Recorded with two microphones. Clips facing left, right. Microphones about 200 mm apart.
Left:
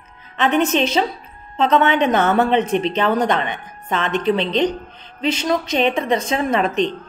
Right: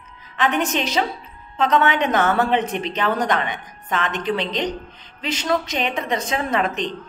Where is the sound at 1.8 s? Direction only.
20° left (ahead or behind).